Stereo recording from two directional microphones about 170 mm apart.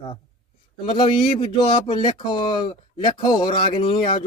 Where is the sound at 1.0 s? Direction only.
30° left (ahead or behind).